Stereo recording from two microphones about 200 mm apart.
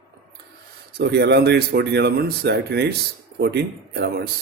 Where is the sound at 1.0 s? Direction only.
55° right (ahead or behind).